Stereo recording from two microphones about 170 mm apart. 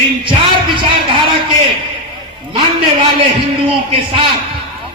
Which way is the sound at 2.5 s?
30° right (ahead or behind).